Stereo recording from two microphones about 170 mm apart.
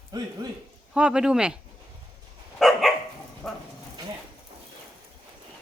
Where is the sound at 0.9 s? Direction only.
5° right (ahead or behind).